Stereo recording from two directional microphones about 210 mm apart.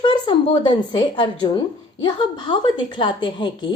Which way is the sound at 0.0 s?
25° left (ahead or behind).